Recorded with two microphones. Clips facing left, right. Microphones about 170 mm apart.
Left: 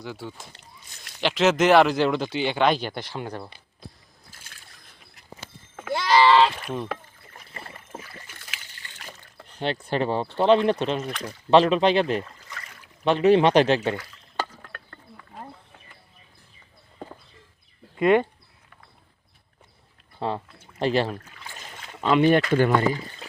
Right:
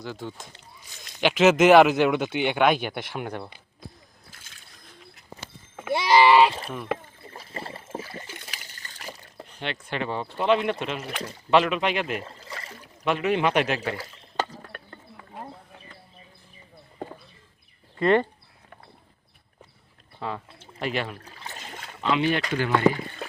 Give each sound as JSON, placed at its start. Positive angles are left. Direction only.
{"t": 0.0, "sound": "speech", "side_deg": 10}
{"t": 1.2, "sound": "speech", "side_deg": -5}
{"t": 5.8, "sound": "a sound", "side_deg": -20}
{"t": 6.5, "sound": "speech", "side_deg": -30}
{"t": 7.3, "sound": "rowboat", "side_deg": -30}
{"t": 8.4, "sound": "water", "side_deg": -40}
{"t": 9.8, "sound": "speech", "side_deg": 35}
{"t": 12.2, "sound": "a sound", "side_deg": -30}
{"t": 13.1, "sound": "speech", "side_deg": 30}
{"t": 13.9, "sound": "speech", "side_deg": -30}
{"t": 14.6, "sound": "a sound", "side_deg": -20}
{"t": 17.9, "sound": "speech", "side_deg": 10}
{"t": 20.1, "sound": "speech", "side_deg": 30}
{"t": 22.0, "sound": "speech", "side_deg": 45}